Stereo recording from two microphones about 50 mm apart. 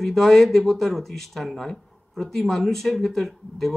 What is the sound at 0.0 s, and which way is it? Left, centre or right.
Speech, centre.